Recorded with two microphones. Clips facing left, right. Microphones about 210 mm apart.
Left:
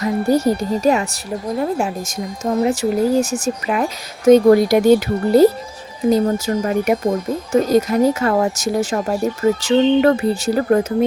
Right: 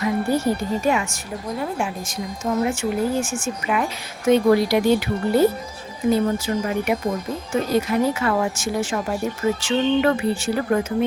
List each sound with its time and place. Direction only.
0.0 s a woman's voice: 40° left (ahead or behind)